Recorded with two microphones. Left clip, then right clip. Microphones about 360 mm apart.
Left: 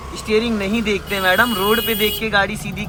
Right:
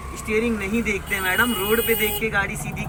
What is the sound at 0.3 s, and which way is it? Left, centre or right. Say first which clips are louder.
Speech: left 4 dB; centre.